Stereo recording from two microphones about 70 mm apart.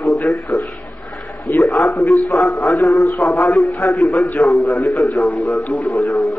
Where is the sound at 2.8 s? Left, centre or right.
Left.